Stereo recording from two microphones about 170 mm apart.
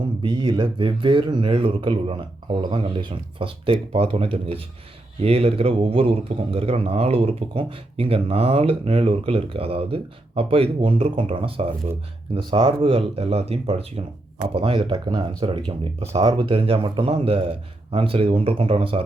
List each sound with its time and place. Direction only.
0.2 s a man's voice: 30° right (ahead or behind)